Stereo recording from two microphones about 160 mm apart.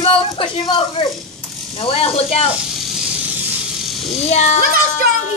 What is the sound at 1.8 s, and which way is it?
Speech, 40° left (ahead or behind).